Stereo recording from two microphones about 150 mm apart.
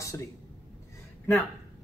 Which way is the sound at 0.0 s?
20° left (ahead or behind).